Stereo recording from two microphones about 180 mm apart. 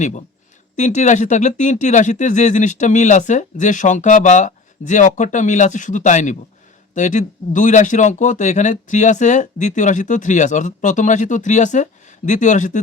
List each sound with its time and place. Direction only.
0.8 s speech: 40° left (ahead or behind)